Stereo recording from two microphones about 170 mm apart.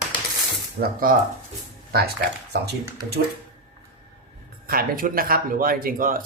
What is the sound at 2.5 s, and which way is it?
Speech, 85° right.